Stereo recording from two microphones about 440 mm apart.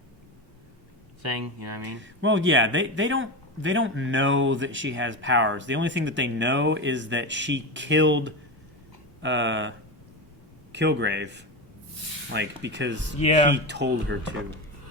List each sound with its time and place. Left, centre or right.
1.2 s speech: right
2.0 s speech: right
13.1 s speech: centre
13.5 s speech: right